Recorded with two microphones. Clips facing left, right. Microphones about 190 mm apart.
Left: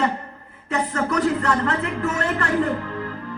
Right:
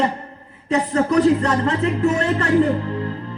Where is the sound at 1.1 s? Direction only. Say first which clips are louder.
Right 5 dB; 25° right (ahead or behind).